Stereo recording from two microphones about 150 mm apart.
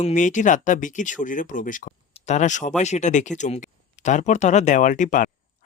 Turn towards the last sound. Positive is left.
turn(degrees=60)  # may be behind; listen again after turning